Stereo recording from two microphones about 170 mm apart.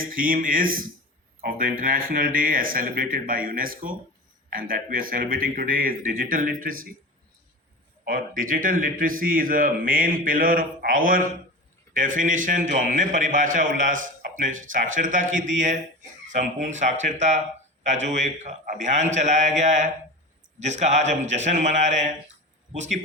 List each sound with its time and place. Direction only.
0.0 s a man's voice: 55° right (ahead or behind)
8.0 s a man's voice: 55° right (ahead or behind)